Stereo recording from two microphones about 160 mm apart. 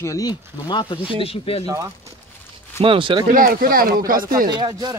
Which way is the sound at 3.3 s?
65° right (ahead or behind).